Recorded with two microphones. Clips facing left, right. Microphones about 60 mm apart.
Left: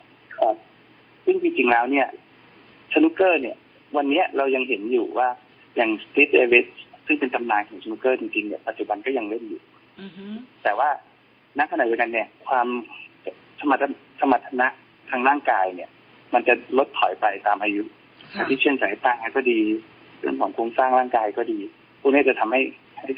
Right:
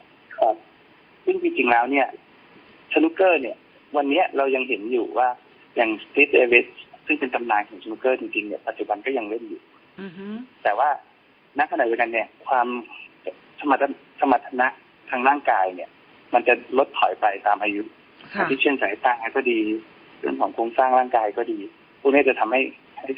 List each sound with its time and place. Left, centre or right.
0.3 s a sound: centre
1.2 s a man's voice: centre
10.0 s speech: right
10.6 s a man's voice: centre
18.2 s a sound: right
18.6 s a man's voice: centre